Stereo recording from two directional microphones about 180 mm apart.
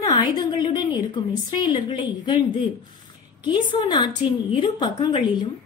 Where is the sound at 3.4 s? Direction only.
25° left (ahead or behind).